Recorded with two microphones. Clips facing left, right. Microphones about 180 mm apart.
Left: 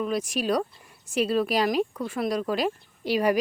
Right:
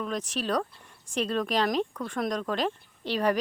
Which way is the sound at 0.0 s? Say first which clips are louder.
Left 4 dB; 10° left (ahead or behind).